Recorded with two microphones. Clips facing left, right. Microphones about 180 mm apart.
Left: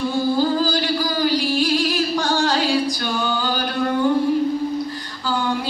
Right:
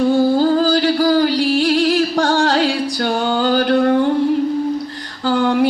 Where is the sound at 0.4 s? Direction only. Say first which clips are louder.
Right 5 dB; 60° right (ahead or behind).